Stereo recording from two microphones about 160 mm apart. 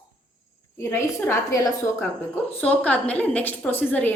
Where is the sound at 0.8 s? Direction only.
15° left (ahead or behind).